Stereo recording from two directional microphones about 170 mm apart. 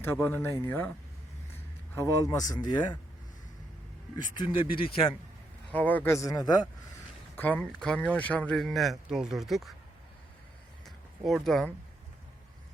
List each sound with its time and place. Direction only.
0.0 s speech: 15° left (ahead or behind)
2.0 s a man's voice: 20° left (ahead or behind)
4.4 s a man's voice: 30° left (ahead or behind)
5.7 s speech: 10° left (ahead or behind)
7.3 s speech: 10° left (ahead or behind)
10.8 s a sound: centre (ahead or behind)
11.4 s speech: centre (ahead or behind)